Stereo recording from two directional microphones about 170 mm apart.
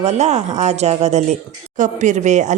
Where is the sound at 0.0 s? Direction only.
40° right (ahead or behind).